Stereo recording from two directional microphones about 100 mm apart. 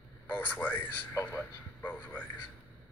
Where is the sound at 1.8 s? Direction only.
20° left (ahead or behind).